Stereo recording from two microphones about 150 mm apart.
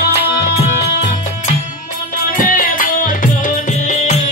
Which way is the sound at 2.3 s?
65° left (ahead or behind).